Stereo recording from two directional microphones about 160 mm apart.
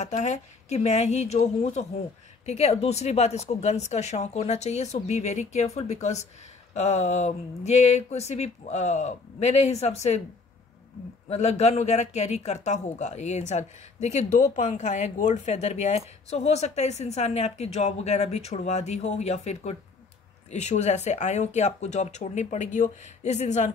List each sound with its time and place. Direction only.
0.0 s speech: 45° left (ahead or behind)
11.2 s speech: 45° left (ahead or behind)